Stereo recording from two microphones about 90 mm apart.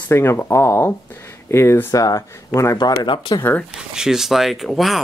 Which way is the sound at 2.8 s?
55° left (ahead or behind).